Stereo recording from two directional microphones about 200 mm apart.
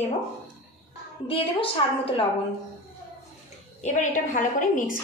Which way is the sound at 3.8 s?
40° left (ahead or behind).